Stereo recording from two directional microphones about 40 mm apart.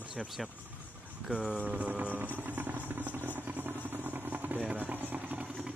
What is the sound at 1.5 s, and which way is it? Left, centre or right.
Speech, right.